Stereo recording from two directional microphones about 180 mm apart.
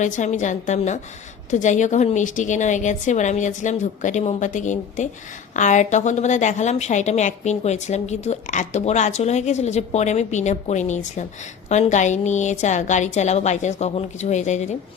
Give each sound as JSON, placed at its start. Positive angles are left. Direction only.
{"t": 0.0, "sound": "a woman's voice", "side_deg": 45}